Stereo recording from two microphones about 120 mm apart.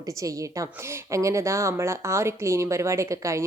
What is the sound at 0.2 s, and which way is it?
Speech, 25° right (ahead or behind).